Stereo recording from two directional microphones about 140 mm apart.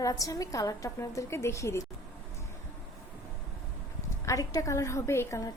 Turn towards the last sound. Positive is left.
turn(degrees=20)  # may be behind; listen again after turning